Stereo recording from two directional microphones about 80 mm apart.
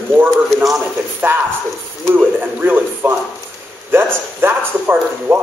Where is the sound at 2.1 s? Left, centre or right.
Right.